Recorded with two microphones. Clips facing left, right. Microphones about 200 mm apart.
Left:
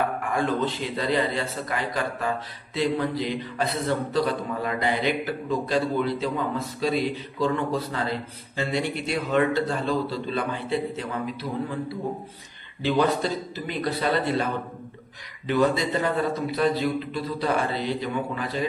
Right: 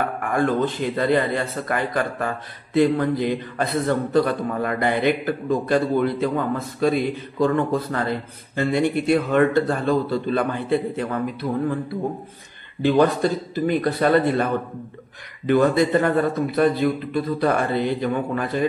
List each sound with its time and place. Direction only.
0.2 s a man's voice: 55° right (ahead or behind)
12.8 s a man's voice: 50° right (ahead or behind)